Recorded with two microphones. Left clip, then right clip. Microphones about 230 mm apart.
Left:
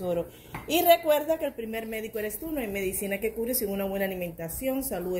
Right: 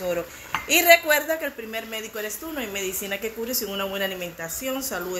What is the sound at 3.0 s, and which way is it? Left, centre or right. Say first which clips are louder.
Speech: right 1 dB; right.